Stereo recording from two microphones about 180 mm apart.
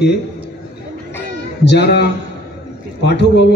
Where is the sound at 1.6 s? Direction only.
65° left (ahead or behind).